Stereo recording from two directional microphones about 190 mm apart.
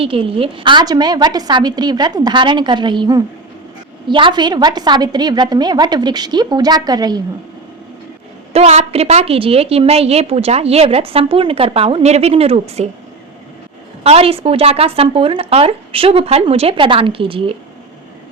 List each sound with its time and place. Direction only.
0.0 s a woman's voice: 30° right (ahead or behind)
8.5 s a woman's voice: 35° right (ahead or behind)
14.0 s a woman's voice: 30° right (ahead or behind)